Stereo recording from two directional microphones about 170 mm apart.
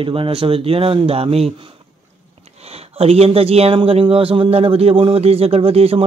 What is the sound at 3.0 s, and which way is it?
Speech, 35° right (ahead or behind).